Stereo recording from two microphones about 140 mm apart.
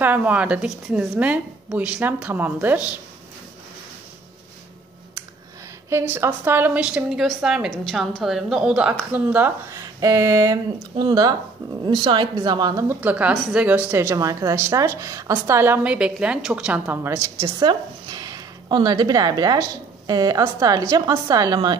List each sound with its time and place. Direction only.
0.0 s a woman's voice: 10° right (ahead or behind)
5.9 s a woman's voice: 20° right (ahead or behind)
12.8 s a woman's voice: 10° right (ahead or behind)
16.8 s a woman's voice: 15° right (ahead or behind)